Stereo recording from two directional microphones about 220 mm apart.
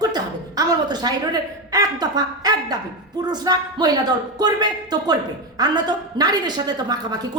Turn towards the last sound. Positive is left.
turn(degrees=-20)  # may be behind; listen again after turning